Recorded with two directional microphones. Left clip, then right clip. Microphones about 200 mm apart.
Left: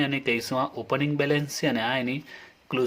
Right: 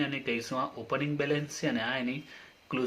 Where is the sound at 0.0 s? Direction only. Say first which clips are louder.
Left 6 dB; 40° left (ahead or behind).